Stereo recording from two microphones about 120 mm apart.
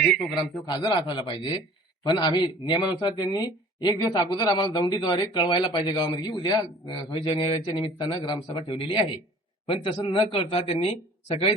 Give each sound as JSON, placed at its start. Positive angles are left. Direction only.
{"t": 0.0, "sound": "a man's voice", "side_deg": 5}
{"t": 0.6, "sound": "a man's voice", "side_deg": 40}